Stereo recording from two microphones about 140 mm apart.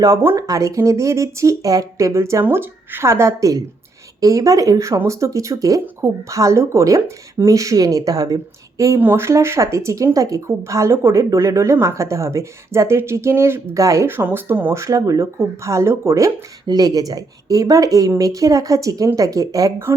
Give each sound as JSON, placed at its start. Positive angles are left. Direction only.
{"t": 0.0, "sound": "speech", "side_deg": -20}